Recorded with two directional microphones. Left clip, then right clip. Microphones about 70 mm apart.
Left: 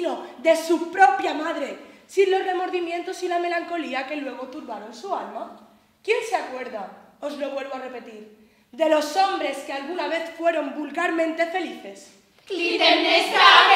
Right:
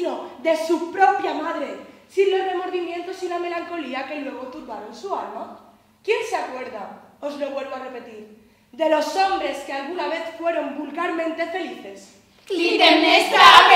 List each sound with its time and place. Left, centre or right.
0.0 s a woman's voice: left
12.4 s speech: centre
12.8 s child singing: centre